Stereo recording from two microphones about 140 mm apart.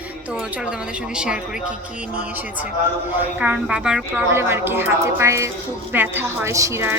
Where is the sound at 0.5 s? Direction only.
5° right (ahead or behind).